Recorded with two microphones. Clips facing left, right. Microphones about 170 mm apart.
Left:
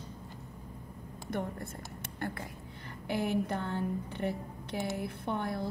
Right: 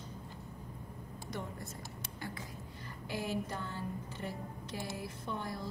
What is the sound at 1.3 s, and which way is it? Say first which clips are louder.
A woman's voice: left 7 dB; 55° left (ahead or behind).